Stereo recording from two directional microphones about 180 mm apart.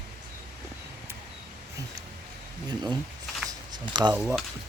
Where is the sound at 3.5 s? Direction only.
25° right (ahead or behind).